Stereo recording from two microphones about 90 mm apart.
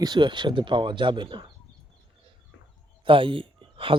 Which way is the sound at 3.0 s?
70° right (ahead or behind).